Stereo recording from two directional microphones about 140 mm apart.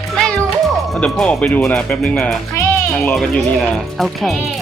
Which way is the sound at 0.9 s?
5° left (ahead or behind).